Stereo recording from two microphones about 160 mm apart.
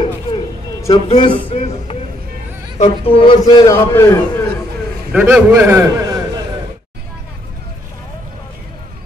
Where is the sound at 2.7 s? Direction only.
40° left (ahead or behind); by 4.4 s 20° left (ahead or behind).